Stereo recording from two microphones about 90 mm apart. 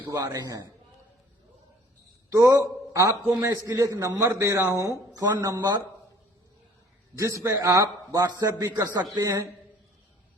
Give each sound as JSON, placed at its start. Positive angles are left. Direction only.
{"t": 0.2, "sound": "a man's voice", "side_deg": -45}
{"t": 2.3, "sound": "a man's voice", "side_deg": -35}
{"t": 5.1, "sound": "a man's voice", "side_deg": -40}
{"t": 5.5, "sound": "a man's voice", "side_deg": -55}
{"t": 7.2, "sound": "a man's voice", "side_deg": -35}